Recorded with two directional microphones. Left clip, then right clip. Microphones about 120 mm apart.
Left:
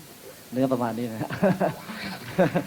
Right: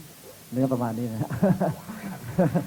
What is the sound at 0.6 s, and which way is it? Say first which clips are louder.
Speech: left 2 dB; 25° left (ahead or behind).